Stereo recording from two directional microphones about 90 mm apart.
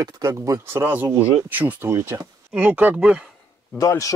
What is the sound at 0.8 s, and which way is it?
Speech, 20° right (ahead or behind).